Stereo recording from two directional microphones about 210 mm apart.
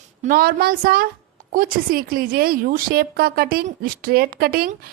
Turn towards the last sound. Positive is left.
turn(degrees=-45)  # may be behind; listen again after turning